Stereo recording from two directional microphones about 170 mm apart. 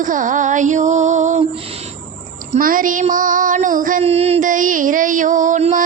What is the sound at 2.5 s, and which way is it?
Female singing, 55° right (ahead or behind).